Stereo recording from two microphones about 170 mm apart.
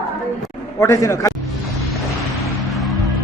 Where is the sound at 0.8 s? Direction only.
15° left (ahead or behind).